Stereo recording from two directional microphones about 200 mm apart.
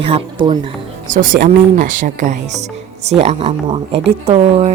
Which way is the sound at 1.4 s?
40° right (ahead or behind).